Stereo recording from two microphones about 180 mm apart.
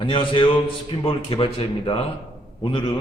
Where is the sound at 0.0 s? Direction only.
30° left (ahead or behind).